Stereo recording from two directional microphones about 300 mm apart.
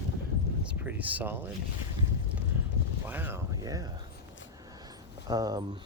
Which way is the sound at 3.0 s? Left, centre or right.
Centre.